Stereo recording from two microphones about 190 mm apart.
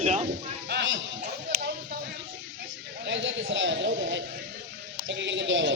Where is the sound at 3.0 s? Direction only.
70° right (ahead or behind).